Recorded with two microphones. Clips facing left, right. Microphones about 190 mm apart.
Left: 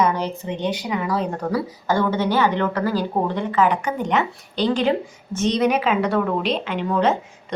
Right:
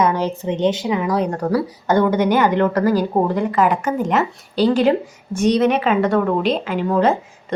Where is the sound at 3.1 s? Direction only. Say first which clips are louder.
Right 4 dB; 25° right (ahead or behind).